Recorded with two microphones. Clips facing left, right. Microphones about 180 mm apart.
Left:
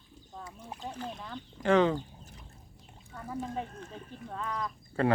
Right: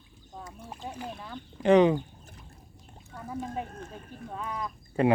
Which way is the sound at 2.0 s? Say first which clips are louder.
Right 2 dB; 50° right (ahead or behind).